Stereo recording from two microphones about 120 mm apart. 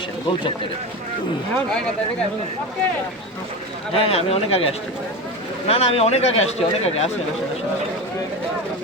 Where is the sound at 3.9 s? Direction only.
55° left (ahead or behind).